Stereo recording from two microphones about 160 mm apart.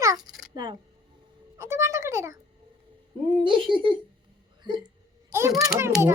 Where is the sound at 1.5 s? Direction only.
15° right (ahead or behind).